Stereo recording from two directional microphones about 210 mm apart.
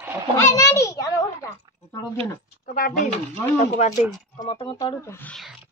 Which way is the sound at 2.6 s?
40° left (ahead or behind).